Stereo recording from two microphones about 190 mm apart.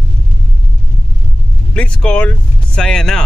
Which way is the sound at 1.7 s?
5° left (ahead or behind).